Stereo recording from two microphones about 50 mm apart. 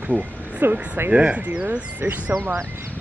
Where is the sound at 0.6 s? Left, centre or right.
Right.